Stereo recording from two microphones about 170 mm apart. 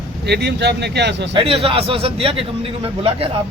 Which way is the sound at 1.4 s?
35° right (ahead or behind).